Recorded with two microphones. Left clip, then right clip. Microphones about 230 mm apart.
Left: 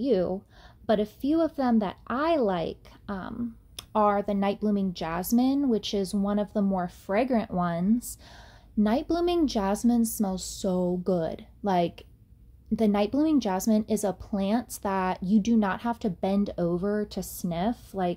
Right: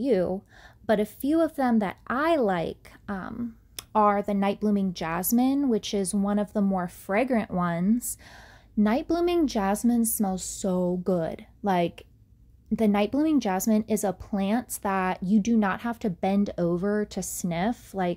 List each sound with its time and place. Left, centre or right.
0.0 s a woman's voice: right